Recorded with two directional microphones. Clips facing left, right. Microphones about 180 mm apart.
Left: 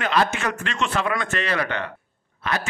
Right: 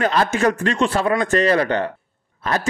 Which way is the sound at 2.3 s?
40° right (ahead or behind).